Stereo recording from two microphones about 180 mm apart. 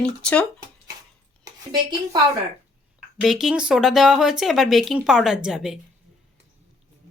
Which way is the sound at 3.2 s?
Centre (ahead or behind).